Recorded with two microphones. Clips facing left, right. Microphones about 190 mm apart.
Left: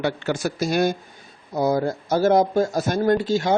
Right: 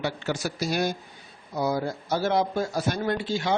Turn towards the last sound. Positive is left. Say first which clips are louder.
# left 7 dB
turn(degrees=45)  # may be behind; listen again after turning